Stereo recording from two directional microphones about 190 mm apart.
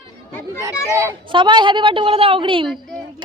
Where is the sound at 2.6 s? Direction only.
Centre (ahead or behind).